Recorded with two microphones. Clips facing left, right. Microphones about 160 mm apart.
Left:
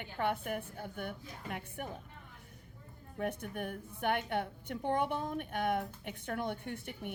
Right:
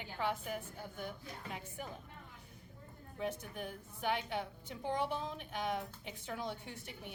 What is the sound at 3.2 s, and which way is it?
A woman's voice, 60° left (ahead or behind).